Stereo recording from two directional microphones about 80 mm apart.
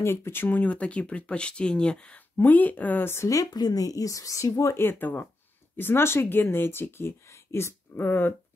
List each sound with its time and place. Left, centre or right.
0.0 s speech: left
3.4 s speech: left
4.8 s speech: left